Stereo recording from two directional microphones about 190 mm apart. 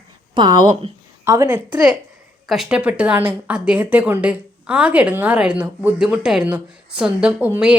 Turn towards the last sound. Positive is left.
turn(degrees=-10)  # may be behind; listen again after turning